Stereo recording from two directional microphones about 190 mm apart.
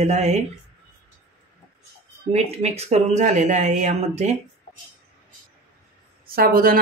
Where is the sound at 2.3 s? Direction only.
35° right (ahead or behind).